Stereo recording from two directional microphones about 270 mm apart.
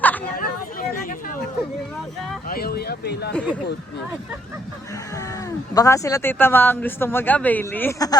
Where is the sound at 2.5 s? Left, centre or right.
Left.